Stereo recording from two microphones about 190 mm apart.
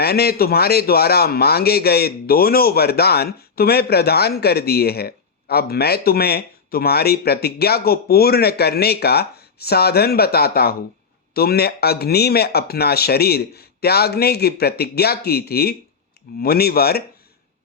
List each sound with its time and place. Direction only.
0.0 s speech: 55° left (ahead or behind)